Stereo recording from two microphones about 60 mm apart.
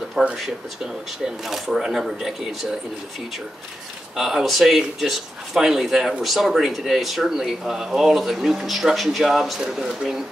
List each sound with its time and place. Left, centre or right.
0.2 s speech: centre
4.2 s speech: centre